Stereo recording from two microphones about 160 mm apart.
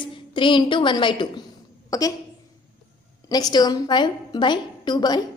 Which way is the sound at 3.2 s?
25° left (ahead or behind).